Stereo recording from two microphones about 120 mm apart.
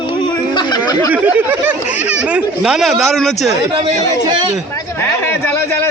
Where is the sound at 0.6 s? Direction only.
35° left (ahead or behind).